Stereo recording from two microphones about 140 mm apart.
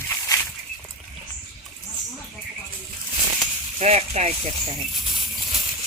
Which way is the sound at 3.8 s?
50° right (ahead or behind).